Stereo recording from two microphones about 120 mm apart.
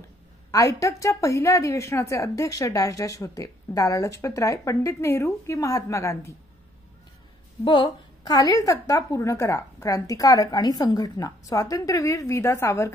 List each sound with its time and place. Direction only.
0.5 s a woman's voice: 25° left (ahead or behind)
7.6 s a woman's voice: 40° left (ahead or behind); by 12.9 s 20° left (ahead or behind)